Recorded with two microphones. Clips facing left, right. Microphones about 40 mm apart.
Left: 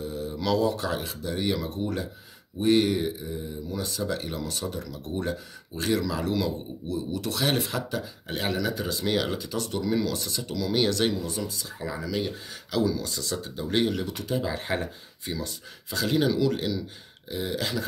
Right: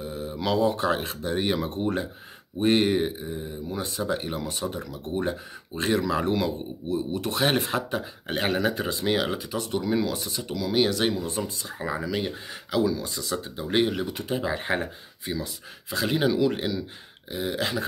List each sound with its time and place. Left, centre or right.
0.0 s speech: centre
11.1 s speech: right
12.7 s speech: centre
15.2 s speech: centre